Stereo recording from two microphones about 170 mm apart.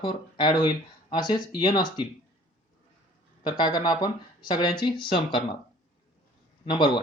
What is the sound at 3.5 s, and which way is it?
Speech, 25° left (ahead or behind).